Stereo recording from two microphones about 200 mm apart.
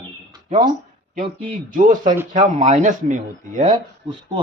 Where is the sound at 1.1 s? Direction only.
40° right (ahead or behind).